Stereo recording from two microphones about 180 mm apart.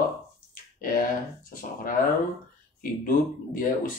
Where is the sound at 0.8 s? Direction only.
50° left (ahead or behind).